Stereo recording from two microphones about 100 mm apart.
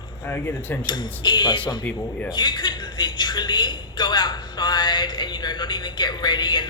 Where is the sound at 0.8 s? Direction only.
45° left (ahead or behind).